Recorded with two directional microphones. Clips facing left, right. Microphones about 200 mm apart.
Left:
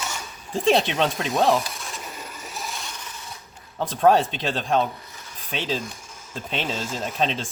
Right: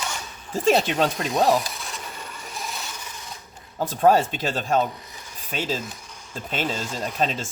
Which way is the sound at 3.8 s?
5° right (ahead or behind).